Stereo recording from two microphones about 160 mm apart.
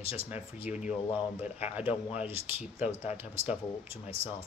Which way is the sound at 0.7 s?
50° left (ahead or behind).